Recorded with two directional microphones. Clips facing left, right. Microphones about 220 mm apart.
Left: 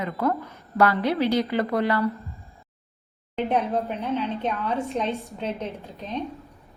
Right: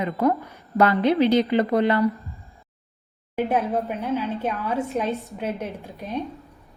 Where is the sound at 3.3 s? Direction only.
5° right (ahead or behind).